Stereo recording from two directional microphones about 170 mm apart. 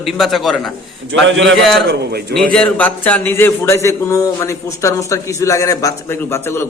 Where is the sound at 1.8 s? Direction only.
70° right (ahead or behind).